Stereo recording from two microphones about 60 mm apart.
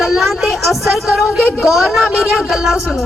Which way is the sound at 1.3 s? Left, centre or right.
Right.